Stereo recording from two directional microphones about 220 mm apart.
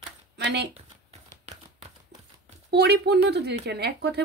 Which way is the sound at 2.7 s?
50° right (ahead or behind).